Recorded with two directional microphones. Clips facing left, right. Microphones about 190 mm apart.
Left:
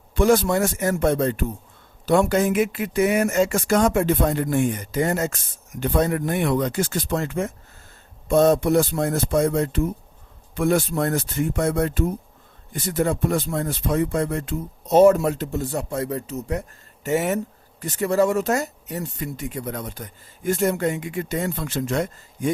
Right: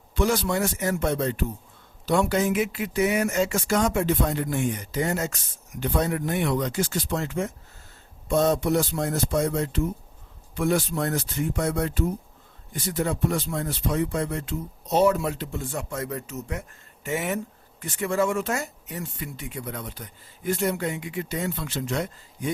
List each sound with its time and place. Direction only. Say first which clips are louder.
0.1 s speech: left 6 dB; 50° left (ahead or behind)